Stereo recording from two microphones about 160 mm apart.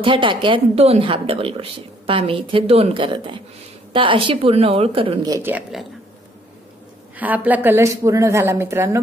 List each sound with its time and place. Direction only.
0.0 s a woman's voice: 30° right (ahead or behind)
5.2 s speech: 20° right (ahead or behind)
5.5 s speech: centre (ahead or behind)
7.2 s a woman's voice: 10° right (ahead or behind)